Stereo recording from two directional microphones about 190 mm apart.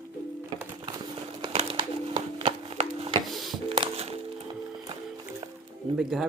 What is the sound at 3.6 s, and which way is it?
Music, 30° right (ahead or behind).